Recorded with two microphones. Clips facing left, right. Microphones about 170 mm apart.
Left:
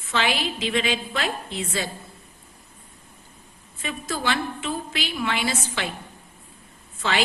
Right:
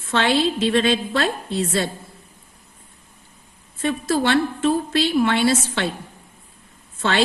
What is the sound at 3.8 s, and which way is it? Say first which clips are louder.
A woman's voice: right 8 dB; 70° right (ahead or behind).